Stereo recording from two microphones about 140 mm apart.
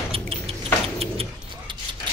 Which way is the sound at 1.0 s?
45° right (ahead or behind).